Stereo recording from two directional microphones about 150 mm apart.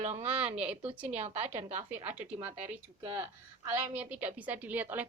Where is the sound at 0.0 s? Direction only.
45° right (ahead or behind).